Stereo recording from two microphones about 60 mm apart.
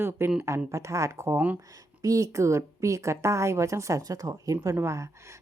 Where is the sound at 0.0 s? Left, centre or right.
Right.